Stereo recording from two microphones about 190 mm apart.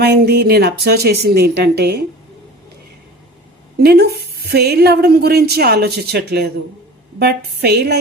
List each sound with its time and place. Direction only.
0.0 s a woman's voice: 55° right (ahead or behind)
3.8 s a woman's voice: 55° right (ahead or behind)